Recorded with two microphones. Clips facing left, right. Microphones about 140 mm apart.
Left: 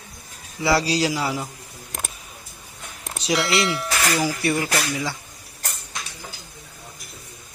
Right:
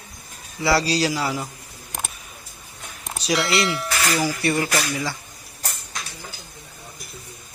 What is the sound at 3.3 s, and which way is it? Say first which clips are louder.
A man's voice: even; centre (ahead or behind).